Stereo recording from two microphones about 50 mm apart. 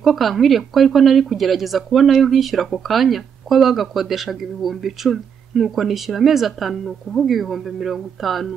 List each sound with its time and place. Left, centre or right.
0.0 s speech: centre